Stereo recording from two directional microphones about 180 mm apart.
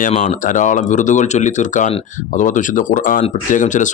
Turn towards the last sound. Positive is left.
turn(degrees=45)  # may be behind; listen again after turning